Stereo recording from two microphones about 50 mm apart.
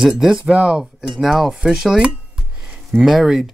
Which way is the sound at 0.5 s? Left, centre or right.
Right.